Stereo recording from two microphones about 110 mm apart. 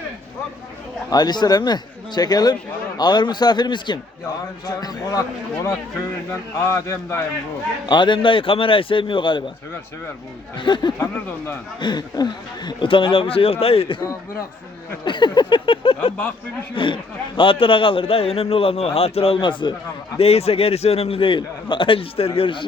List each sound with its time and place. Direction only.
1.1 s a man's voice: 40° left (ahead or behind)
6.7 s speech: 25° left (ahead or behind)
7.9 s speech: 45° left (ahead or behind)
10.6 s speech: 45° left (ahead or behind)
11.0 s speech: 20° left (ahead or behind)
11.8 s speech: 40° left (ahead or behind); by 14.0 s 55° left (ahead or behind)
15.0 s a man's voice: 45° left (ahead or behind)
20.1 s a man's voice: 65° left (ahead or behind); by 22.6 s 50° left (ahead or behind)